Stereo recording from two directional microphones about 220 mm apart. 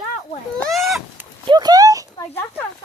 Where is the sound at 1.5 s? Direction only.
20° right (ahead or behind).